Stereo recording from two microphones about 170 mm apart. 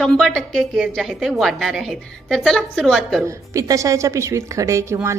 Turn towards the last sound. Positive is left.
turn(degrees=-15)  # may be behind; listen again after turning